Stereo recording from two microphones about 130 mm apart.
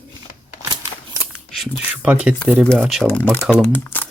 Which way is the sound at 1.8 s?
10° right (ahead or behind).